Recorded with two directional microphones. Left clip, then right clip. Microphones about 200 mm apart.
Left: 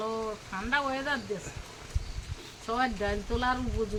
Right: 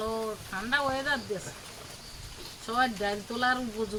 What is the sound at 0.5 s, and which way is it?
Speech, 20° right (ahead or behind).